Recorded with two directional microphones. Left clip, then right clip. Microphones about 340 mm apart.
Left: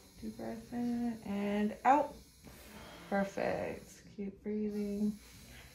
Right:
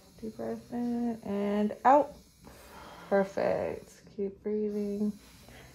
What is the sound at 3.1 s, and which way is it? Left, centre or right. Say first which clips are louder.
Speech: right 7 dB; centre.